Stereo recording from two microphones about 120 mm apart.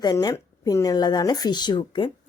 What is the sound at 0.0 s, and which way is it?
Speech, 35° left (ahead or behind).